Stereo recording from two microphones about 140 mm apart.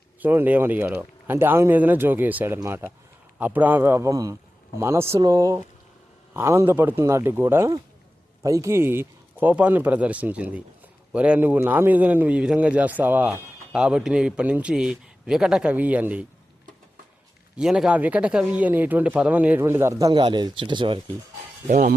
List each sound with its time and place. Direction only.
0.2 s speech: 15° right (ahead or behind)
17.6 s speech: 5° right (ahead or behind); by 21.0 s 35° right (ahead or behind)
21.7 s speech: 85° right